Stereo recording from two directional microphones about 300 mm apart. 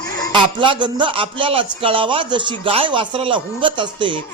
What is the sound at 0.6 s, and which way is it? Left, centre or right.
A man's voice, centre.